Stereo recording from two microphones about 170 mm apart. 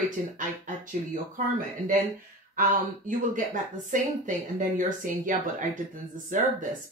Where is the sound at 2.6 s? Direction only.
50° right (ahead or behind).